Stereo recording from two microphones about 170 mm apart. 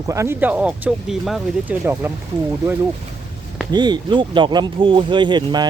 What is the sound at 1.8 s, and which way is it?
Speech, 15° right (ahead or behind).